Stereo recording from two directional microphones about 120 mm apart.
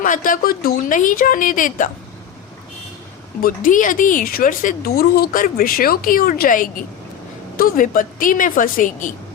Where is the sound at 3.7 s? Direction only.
90° left.